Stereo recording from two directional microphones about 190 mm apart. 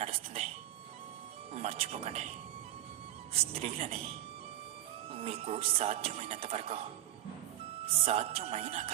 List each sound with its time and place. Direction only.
0.0 s a sound: 30° right (ahead or behind)
1.5 s speech: 30° right (ahead or behind)
3.3 s speech: 30° right (ahead or behind)
5.1 s speech: 30° right (ahead or behind)
8.0 s speech: 30° right (ahead or behind)